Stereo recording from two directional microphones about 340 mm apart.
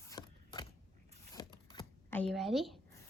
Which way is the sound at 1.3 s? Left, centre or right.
Centre.